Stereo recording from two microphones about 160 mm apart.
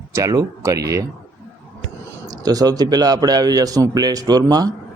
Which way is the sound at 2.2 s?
25° right (ahead or behind).